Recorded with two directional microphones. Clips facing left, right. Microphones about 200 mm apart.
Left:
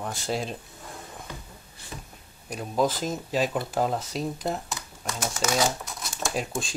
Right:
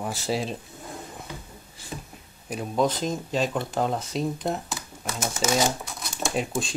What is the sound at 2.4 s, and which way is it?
Speech, centre (ahead or behind).